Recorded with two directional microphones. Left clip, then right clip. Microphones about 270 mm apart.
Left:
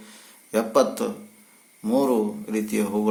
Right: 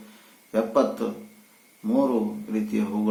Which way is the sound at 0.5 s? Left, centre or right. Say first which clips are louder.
Left 2 dB; left.